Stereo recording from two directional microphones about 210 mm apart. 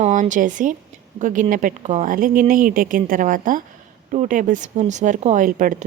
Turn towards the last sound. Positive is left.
turn(degrees=-40)  # may be behind; listen again after turning